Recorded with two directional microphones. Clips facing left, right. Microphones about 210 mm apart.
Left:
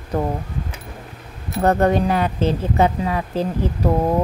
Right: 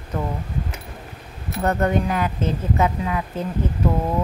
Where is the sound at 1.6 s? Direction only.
35° left (ahead or behind).